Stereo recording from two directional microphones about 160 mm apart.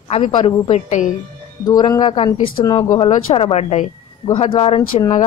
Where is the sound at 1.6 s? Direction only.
25° left (ahead or behind).